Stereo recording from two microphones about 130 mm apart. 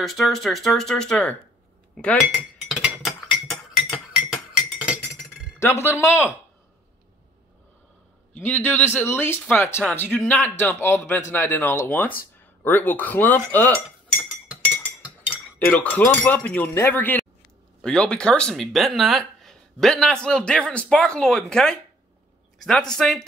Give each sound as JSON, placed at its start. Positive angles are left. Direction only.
{"t": 0.0, "sound": "speech", "side_deg": 0}
{"t": 3.0, "sound": "chink", "side_deg": 0}
{"t": 5.6, "sound": "speech", "side_deg": 20}
{"t": 8.4, "sound": "a man's voice", "side_deg": 15}
{"t": 14.5, "sound": "chink", "side_deg": -10}
{"t": 15.6, "sound": "a man's voice", "side_deg": 15}